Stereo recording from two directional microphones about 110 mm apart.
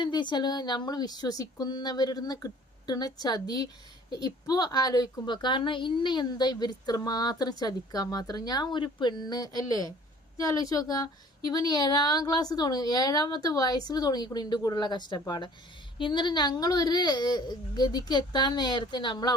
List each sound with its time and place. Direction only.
0.0 s a woman's voice: 45° left (ahead or behind)